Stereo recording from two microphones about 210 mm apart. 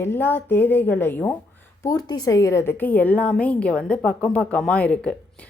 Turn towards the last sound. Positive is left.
turn(degrees=5)  # may be behind; listen again after turning